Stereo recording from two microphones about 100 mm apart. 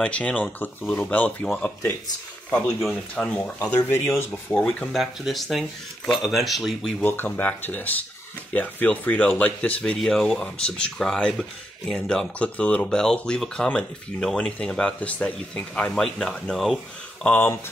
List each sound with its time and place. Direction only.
0.0 s speech: 15° left (ahead or behind)
2.8 s speech: centre (ahead or behind)
3.9 s speech: 25° left (ahead or behind)
4.9 s speech: centre (ahead or behind)
7.0 s speech: 20° left (ahead or behind); by 17.3 s centre (ahead or behind)
17.3 s speech: 20° left (ahead or behind)